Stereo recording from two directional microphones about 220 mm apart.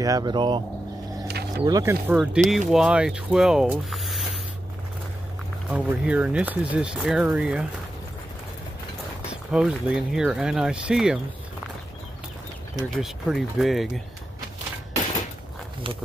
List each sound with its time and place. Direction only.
0.0 s speech: 15° right (ahead or behind)
1.6 s speech: 15° right (ahead or behind)
2.1 s speech: centre (ahead or behind)
5.7 s speech: 5° right (ahead or behind)
9.3 s speech: 5° right (ahead or behind)
13.0 s speech: centre (ahead or behind)